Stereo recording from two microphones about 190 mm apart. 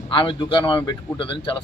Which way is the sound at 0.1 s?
25° left (ahead or behind).